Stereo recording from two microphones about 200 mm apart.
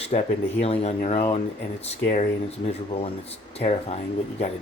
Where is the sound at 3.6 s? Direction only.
30° left (ahead or behind).